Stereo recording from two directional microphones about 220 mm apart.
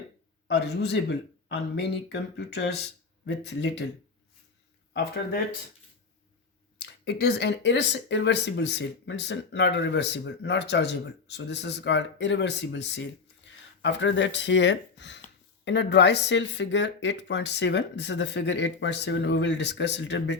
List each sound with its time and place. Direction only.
0.4 s speech: 50° left (ahead or behind)
4.9 s speech: 45° left (ahead or behind)
6.7 s speech: 50° left (ahead or behind)